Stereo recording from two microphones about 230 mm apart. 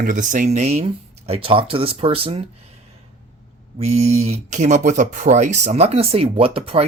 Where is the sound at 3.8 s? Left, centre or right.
Right.